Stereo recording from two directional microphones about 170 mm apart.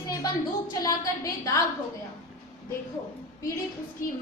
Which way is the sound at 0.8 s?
20° left (ahead or behind).